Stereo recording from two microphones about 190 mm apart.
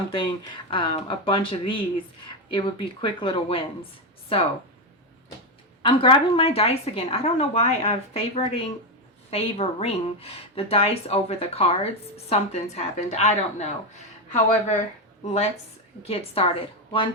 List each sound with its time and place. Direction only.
0.1 s speech: 25° left (ahead or behind)
5.8 s speech: 25° left (ahead or behind)
16.0 s speech: 30° left (ahead or behind)